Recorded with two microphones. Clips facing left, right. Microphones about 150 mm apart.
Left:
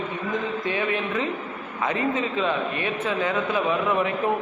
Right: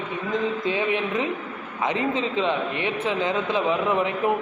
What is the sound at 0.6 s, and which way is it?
A man's voice, 20° right (ahead or behind).